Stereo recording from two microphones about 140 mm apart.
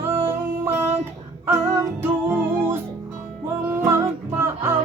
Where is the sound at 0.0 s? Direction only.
20° right (ahead or behind).